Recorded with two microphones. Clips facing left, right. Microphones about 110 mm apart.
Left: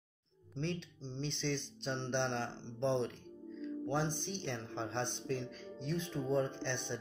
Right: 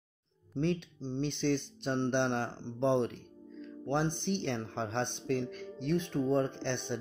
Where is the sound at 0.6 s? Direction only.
55° right (ahead or behind).